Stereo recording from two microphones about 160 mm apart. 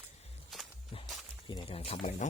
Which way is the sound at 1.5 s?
30° left (ahead or behind).